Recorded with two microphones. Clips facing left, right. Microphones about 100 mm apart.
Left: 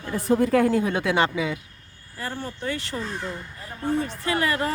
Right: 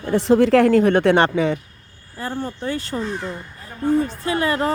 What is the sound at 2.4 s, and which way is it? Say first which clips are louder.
Speech: right 5 dB; 40° right (ahead or behind).